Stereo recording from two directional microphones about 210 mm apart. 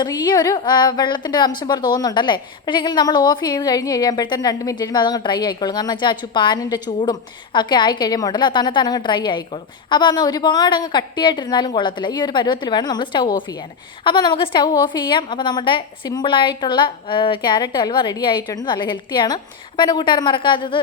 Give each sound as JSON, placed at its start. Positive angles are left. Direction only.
{"t": 0.0, "sound": "a woman's voice", "side_deg": 20}